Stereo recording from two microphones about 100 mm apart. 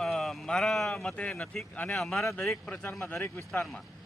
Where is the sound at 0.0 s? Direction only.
Centre (ahead or behind).